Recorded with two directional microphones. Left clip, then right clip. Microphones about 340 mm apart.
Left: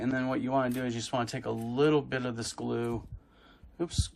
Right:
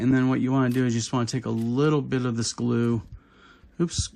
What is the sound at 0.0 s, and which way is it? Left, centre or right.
Speech, right.